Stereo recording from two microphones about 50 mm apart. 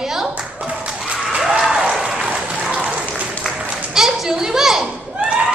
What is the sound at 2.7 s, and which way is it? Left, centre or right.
Applause, right.